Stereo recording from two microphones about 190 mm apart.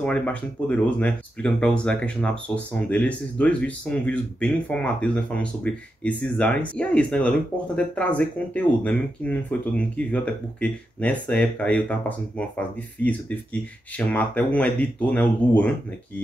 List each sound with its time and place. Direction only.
0.0 s speech: 5° left (ahead or behind)